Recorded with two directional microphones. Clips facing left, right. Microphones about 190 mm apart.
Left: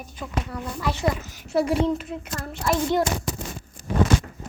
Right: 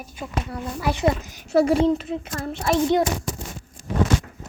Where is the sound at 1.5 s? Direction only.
40° right (ahead or behind).